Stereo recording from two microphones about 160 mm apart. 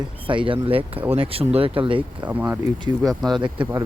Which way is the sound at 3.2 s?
30° right (ahead or behind).